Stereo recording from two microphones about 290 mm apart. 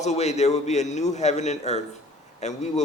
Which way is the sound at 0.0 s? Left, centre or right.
Left.